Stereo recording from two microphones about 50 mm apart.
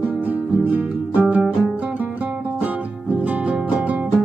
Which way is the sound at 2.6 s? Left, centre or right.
Right.